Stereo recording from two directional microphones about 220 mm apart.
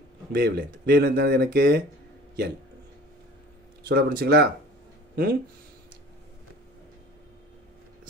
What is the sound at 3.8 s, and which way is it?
Speech, 45° right (ahead or behind).